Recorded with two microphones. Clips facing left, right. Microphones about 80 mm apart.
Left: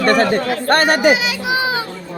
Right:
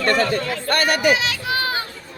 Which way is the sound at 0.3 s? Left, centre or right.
Left.